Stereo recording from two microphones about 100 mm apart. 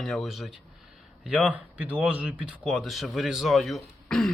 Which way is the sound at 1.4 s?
15° right (ahead or behind).